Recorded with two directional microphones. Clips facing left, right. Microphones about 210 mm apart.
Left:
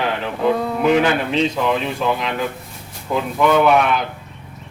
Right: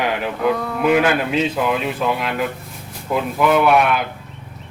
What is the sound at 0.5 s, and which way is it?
Speech, 25° left (ahead or behind).